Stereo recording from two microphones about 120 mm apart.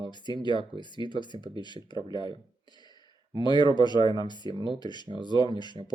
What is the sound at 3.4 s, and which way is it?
Speech, 40° left (ahead or behind).